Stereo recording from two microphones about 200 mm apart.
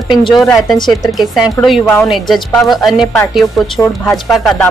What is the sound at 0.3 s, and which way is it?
A woman's voice, centre (ahead or behind).